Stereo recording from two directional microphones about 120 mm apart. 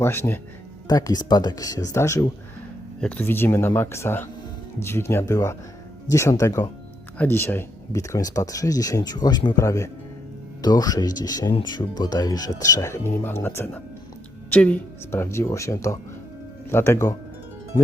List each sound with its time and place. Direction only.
0.0 s speech: 20° left (ahead or behind)
0.9 s speech: 30° left (ahead or behind)
3.0 s speech: 15° left (ahead or behind)